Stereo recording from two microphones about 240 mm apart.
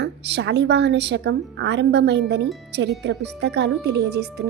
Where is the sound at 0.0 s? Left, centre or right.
Right.